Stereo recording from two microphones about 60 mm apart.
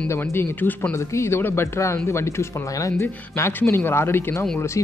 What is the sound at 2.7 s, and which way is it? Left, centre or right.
A man's voice, left.